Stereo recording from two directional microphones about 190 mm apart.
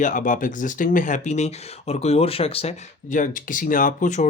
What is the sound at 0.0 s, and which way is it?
Speech, 45° left (ahead or behind).